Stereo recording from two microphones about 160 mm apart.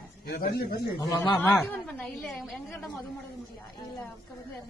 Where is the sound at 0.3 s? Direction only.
80° left.